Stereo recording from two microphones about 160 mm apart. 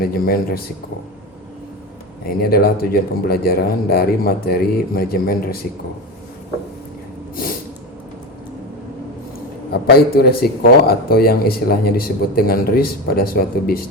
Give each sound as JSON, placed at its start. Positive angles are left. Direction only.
{"t": 0.0, "sound": "speech", "side_deg": 70}
{"t": 2.2, "sound": "speech", "side_deg": 75}
{"t": 9.7, "sound": "speech", "side_deg": 75}